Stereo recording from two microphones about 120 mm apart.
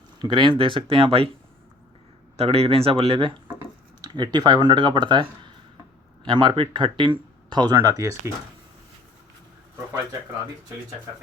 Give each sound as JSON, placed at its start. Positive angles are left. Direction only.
{"t": 0.2, "sound": "speech", "side_deg": -40}
{"t": 2.3, "sound": "speech", "side_deg": -55}
{"t": 4.0, "sound": "speech", "side_deg": -40}
{"t": 7.8, "sound": "speech", "side_deg": -25}